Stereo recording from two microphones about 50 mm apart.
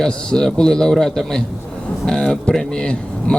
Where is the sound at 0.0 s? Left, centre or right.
Centre.